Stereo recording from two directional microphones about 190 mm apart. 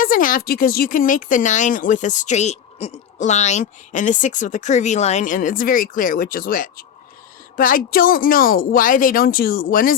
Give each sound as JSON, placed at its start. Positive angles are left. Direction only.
{"t": 0.0, "sound": "speech", "side_deg": 45}